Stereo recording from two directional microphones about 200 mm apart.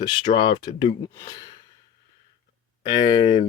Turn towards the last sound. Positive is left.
turn(degrees=20)  # may be behind; listen again after turning